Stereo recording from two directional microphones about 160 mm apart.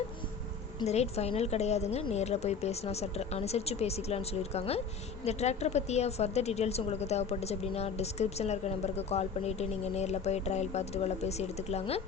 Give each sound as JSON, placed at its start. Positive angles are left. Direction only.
{"t": 0.9, "sound": "a woman's voice", "side_deg": 40}